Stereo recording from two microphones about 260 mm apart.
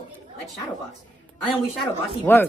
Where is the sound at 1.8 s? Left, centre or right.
Centre.